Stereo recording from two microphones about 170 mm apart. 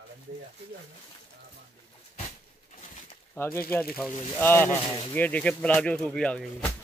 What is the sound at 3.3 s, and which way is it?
Speech, 15° left (ahead or behind).